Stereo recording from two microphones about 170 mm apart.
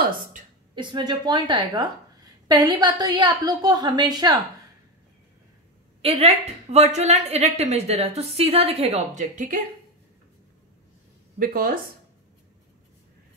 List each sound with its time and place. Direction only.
0.7 s a woman's voice: 25° right (ahead or behind)
6.0 s a woman's voice: 35° right (ahead or behind)
11.3 s speech: 60° right (ahead or behind)